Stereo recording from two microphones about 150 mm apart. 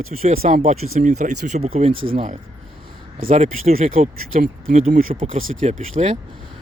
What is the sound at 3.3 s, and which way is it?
Speech, 50° right (ahead or behind).